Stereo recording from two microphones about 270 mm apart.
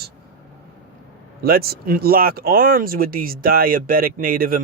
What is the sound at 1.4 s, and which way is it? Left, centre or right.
Speech, right.